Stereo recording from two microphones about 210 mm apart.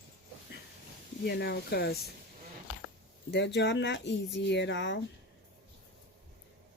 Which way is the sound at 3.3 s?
55° left (ahead or behind).